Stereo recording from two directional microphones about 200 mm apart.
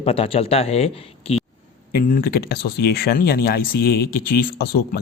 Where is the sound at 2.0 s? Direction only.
45° left (ahead or behind).